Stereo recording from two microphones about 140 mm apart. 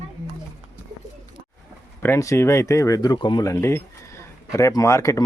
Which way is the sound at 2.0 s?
20° left (ahead or behind).